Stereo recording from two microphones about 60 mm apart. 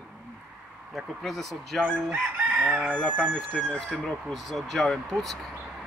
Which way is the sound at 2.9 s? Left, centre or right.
Centre.